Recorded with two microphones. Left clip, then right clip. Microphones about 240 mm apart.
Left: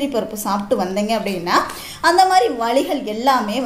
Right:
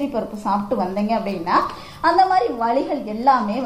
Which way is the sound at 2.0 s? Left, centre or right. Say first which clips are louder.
Left 3 dB; left.